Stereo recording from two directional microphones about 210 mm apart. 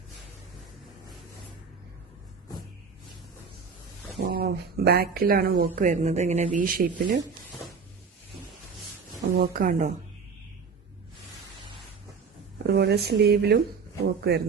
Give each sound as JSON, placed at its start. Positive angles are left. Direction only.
{"t": 4.2, "sound": "speech", "side_deg": -45}
{"t": 9.4, "sound": "a woman's voice", "side_deg": -40}
{"t": 12.7, "sound": "speech", "side_deg": -50}